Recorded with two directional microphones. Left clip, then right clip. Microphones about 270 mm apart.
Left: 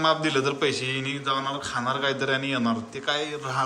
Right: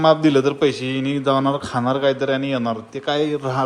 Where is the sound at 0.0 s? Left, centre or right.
Centre.